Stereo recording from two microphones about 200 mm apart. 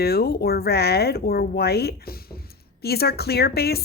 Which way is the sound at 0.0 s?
50° left (ahead or behind).